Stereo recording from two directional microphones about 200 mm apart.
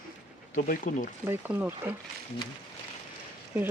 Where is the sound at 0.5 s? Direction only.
40° left (ahead or behind).